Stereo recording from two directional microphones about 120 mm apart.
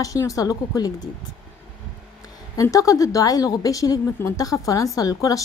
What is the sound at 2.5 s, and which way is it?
A woman's voice, 25° left (ahead or behind).